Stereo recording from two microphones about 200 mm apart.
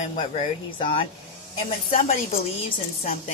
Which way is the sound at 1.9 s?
40° left (ahead or behind).